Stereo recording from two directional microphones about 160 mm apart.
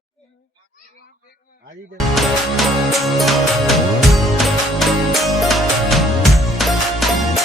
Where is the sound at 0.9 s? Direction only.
75° left (ahead or behind).